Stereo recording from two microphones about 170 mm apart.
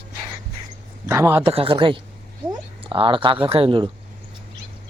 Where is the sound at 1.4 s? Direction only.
35° right (ahead or behind).